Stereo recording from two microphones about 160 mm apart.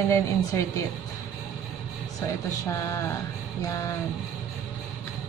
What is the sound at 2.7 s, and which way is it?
Speech, 20° left (ahead or behind).